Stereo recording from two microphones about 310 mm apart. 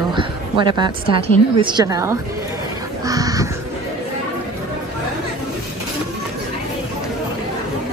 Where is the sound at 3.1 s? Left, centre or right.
Centre.